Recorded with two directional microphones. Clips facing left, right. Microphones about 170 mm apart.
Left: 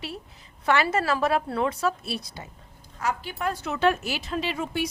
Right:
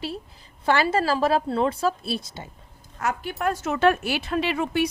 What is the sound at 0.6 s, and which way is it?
A woman's voice, 30° right (ahead or behind).